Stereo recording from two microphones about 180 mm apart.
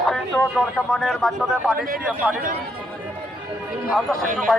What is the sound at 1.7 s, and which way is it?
Speech, 50° right (ahead or behind).